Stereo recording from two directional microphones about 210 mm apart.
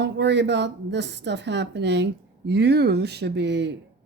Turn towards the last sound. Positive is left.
turn(degrees=-55)  # may be behind; listen again after turning